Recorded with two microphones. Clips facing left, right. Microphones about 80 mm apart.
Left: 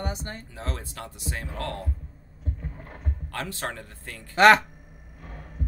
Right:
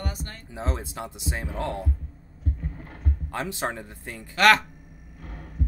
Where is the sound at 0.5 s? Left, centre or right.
Centre.